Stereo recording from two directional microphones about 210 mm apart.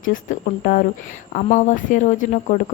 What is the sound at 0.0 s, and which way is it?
Speech, 40° left (ahead or behind).